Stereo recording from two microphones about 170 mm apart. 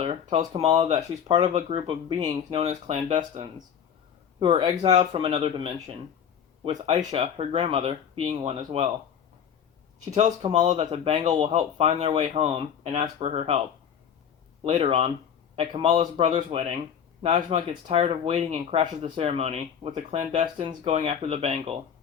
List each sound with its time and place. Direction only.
0.0 s speech: 35° right (ahead or behind)
4.4 s speech: 30° right (ahead or behind)
10.5 s speech: 40° right (ahead or behind)
14.6 s speech: 35° right (ahead or behind)